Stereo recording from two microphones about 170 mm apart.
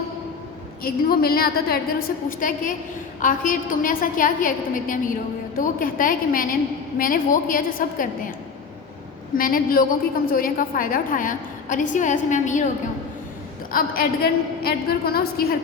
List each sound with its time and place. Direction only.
0.8 s a woman's voice: 60° left (ahead or behind)
9.4 s a woman's voice: 55° left (ahead or behind)
13.7 s a woman's voice: 60° left (ahead or behind)